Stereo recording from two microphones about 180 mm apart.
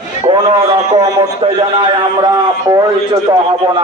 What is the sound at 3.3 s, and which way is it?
Speech, 25° right (ahead or behind).